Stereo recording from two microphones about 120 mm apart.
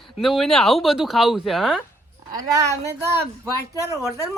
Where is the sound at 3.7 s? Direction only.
25° right (ahead or behind).